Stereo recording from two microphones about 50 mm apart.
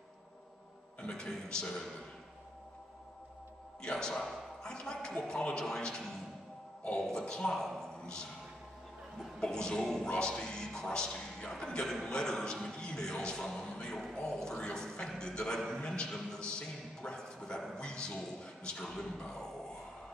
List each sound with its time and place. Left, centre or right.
1.0 s a man's voice: centre
3.8 s a man's voice: centre
9.4 s a man's voice: centre
16.3 s a man's voice: centre